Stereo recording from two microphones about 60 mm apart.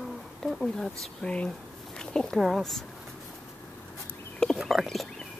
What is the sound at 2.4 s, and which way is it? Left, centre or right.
Speech, centre.